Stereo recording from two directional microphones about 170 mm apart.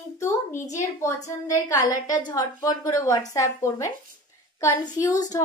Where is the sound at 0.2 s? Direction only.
15° left (ahead or behind).